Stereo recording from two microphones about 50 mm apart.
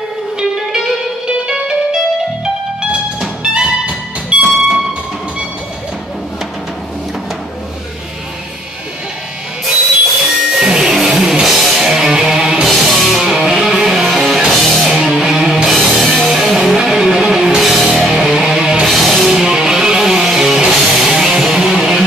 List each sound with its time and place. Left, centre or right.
0.4 s music: centre
10.6 s music: centre
12.6 s music: centre